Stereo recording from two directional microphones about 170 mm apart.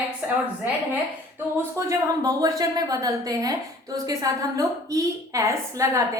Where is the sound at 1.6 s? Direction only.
20° right (ahead or behind).